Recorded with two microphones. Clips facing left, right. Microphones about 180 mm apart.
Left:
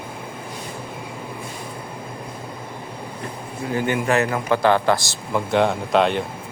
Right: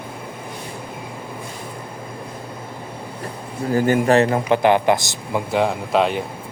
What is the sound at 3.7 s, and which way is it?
Speech, 40° right (ahead or behind).